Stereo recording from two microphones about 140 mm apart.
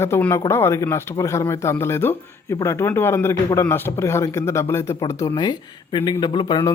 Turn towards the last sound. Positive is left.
turn(degrees=35)  # may be behind; listen again after turning